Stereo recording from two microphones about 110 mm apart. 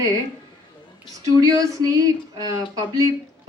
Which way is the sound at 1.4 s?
30° right (ahead or behind).